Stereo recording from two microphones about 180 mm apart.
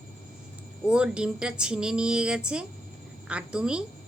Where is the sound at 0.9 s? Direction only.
5° right (ahead or behind).